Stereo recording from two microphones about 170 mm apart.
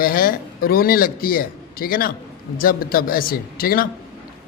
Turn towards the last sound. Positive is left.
turn(degrees=60)  # may be behind; listen again after turning